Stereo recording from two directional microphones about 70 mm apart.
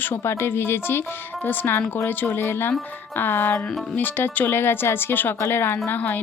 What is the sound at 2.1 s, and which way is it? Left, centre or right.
Speech, left.